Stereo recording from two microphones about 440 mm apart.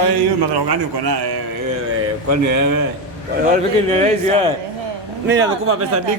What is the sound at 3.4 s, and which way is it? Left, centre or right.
Speech, centre.